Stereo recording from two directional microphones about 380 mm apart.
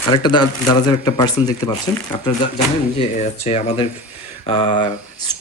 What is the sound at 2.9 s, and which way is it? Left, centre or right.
Speech, centre.